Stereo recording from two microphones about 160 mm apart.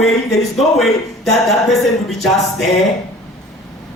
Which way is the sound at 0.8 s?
Centre (ahead or behind).